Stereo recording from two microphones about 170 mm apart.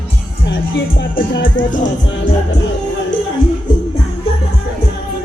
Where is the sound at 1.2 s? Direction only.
90° left.